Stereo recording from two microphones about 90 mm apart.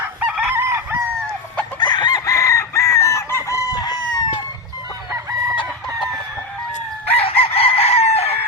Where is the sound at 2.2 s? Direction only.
35° left (ahead or behind).